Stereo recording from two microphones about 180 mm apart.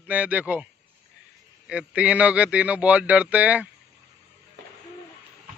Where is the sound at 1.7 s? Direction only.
5° right (ahead or behind).